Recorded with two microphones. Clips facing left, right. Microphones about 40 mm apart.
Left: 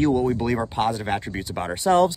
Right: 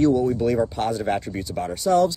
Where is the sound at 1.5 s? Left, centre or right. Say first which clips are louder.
Left 1 dB; left.